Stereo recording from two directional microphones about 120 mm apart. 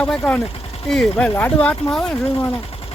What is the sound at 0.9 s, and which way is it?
Speech, centre (ahead or behind).